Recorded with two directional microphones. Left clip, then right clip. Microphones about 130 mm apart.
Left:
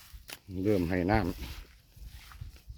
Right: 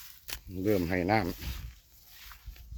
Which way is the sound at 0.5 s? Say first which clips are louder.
Even; 5° right (ahead or behind).